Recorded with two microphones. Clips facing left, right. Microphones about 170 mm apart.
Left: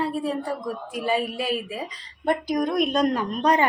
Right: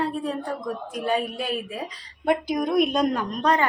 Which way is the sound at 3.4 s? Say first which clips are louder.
Left 1 dB; 15° left (ahead or behind).